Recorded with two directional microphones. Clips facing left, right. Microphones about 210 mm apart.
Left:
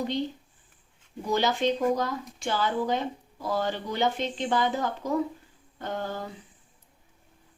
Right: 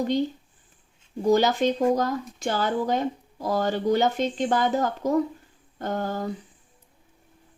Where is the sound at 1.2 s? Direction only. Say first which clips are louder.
Right 5 dB; 45° right (ahead or behind).